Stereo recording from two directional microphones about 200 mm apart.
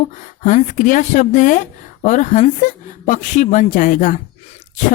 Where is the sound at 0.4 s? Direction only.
40° left (ahead or behind).